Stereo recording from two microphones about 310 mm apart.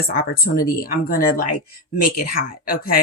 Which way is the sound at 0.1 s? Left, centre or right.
Left.